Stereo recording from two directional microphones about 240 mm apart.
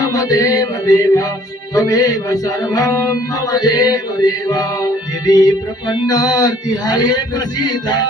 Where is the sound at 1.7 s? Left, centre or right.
Centre.